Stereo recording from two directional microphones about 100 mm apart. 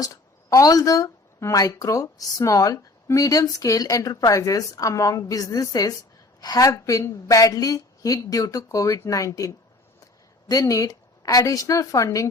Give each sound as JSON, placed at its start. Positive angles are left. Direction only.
{"t": 0.0, "sound": "speech", "side_deg": 35}